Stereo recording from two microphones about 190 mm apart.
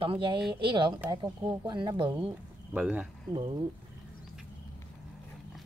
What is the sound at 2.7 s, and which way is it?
Speech, 5° right (ahead or behind).